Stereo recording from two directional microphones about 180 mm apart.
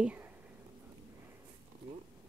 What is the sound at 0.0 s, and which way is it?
Whispering, 10° right (ahead or behind).